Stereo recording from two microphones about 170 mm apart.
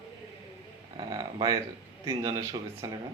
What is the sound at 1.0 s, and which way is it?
Speech, 25° right (ahead or behind).